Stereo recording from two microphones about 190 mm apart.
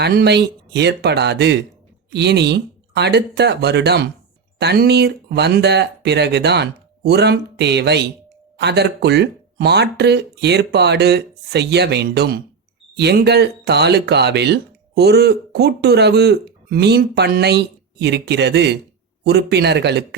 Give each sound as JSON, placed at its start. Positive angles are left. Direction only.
{"t": 0.0, "sound": "speech", "side_deg": -55}